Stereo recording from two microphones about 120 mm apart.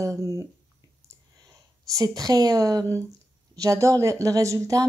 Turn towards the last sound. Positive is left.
turn(degrees=-25)  # may be behind; listen again after turning